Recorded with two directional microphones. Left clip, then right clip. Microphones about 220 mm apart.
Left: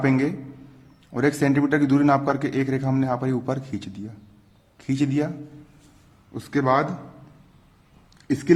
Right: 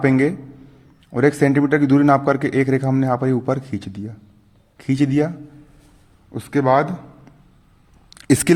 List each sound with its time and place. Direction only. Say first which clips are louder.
1.1 s a man's voice: right 5 dB; 20° right (ahead or behind)
6.3 s a man's voice: right 5 dB; 25° right (ahead or behind)
8.1 s a sound: right 4 dB; 50° right (ahead or behind)